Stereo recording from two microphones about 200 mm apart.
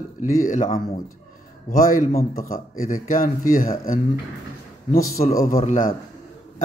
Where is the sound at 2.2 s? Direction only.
45° left (ahead or behind).